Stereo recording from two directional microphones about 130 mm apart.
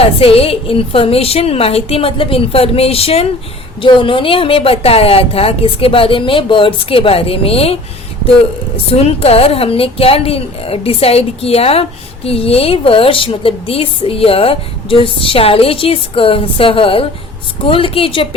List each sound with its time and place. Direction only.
0.0 s a woman's voice: 50° left (ahead or behind)